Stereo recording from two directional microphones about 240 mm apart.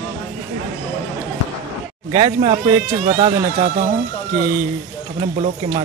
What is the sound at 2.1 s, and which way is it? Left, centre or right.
Speech, right.